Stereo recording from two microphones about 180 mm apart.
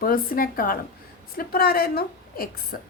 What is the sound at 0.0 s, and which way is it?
A woman's voice, 50° left (ahead or behind).